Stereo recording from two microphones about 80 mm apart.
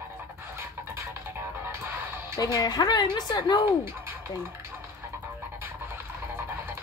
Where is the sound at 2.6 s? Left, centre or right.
Left.